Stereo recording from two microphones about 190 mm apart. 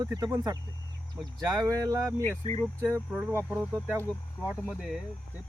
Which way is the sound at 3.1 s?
5° right (ahead or behind).